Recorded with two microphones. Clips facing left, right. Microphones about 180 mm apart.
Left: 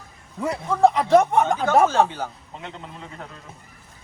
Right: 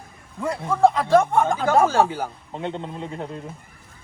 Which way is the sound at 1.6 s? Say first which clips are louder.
Even; 10° right (ahead or behind).